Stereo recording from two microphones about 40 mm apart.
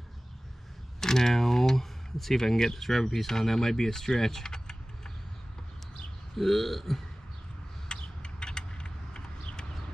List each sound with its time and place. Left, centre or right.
1.0 s speech: centre
6.3 s burping: centre
7.9 s a sound: left